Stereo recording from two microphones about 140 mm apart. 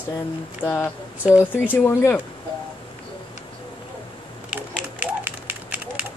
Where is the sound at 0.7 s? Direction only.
15° left (ahead or behind).